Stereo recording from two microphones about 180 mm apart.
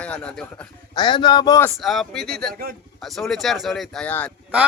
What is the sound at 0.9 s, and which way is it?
Speech, 25° left (ahead or behind).